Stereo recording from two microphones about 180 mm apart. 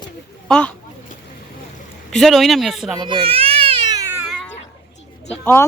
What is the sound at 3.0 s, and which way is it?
Baby cry, 30° right (ahead or behind).